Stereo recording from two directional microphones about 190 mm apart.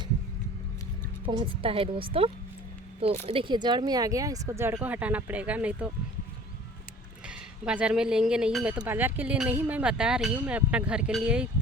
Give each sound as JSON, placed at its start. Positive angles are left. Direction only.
{"t": 1.3, "sound": "a woman's voice", "side_deg": -25}
{"t": 7.3, "sound": "speech", "side_deg": -5}